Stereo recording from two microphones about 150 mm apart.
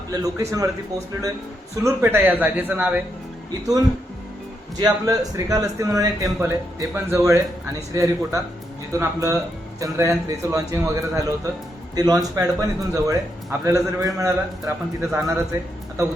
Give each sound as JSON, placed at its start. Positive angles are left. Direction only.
{"t": 0.1, "sound": "speech", "side_deg": -25}
{"t": 1.7, "sound": "a man's voice", "side_deg": -20}
{"t": 4.8, "sound": "speech", "side_deg": -25}